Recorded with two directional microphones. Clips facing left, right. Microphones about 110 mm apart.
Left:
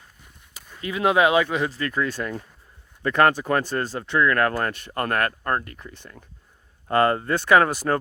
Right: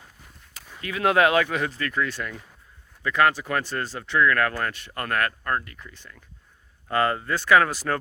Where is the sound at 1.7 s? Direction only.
30° left (ahead or behind).